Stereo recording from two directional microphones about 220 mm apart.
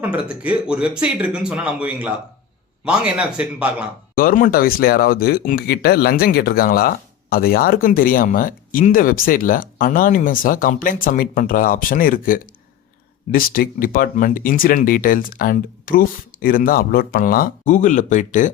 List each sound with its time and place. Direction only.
0.0 s speech: 5° right (ahead or behind)
4.1 s speech: 40° left (ahead or behind)